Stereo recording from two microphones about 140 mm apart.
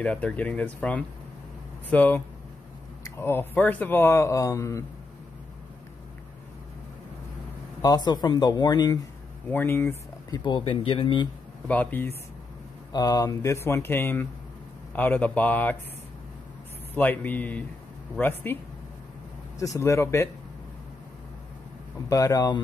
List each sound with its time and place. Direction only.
0.0 s speech: 10° left (ahead or behind)
7.8 s speech: 30° left (ahead or behind)
9.5 s speech: 15° left (ahead or behind)
10.3 s speech: 35° left (ahead or behind)
11.6 s speech: 10° left (ahead or behind)
12.9 s speech: 30° left (ahead or behind); by 15.8 s 10° left (ahead or behind)
16.9 s speech: 10° left (ahead or behind)
19.6 s speech: 20° left (ahead or behind)
22.1 s speech: 25° left (ahead or behind)